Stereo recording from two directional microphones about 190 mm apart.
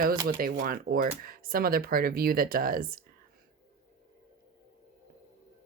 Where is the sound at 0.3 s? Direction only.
50° right (ahead or behind).